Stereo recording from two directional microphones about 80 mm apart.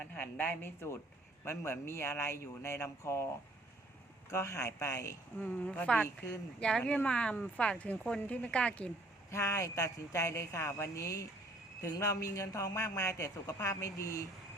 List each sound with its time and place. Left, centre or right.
0.0 s speech: left
4.3 s speech: left
5.4 s speech: centre
9.3 s speech: left